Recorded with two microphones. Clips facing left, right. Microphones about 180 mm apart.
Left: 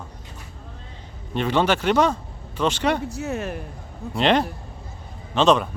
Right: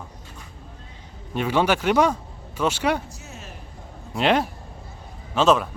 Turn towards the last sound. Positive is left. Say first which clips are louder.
# left 1 dB
turn(degrees=-5)  # may be behind; listen again after turning